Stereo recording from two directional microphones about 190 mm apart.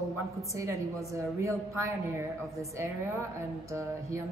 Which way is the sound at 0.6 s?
15° right (ahead or behind).